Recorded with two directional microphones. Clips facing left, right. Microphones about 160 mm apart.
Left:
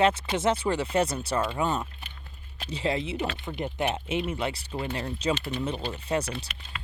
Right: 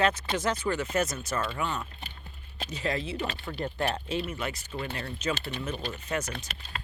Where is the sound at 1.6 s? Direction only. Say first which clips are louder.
Left 5 dB; 20° left (ahead or behind).